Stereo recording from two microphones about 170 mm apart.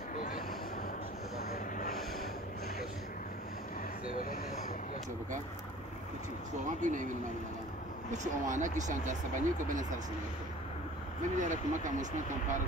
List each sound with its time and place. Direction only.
6.8 s speech: 50° right (ahead or behind)
8.1 s speech: 45° right (ahead or behind)
11.3 s speech: 45° right (ahead or behind)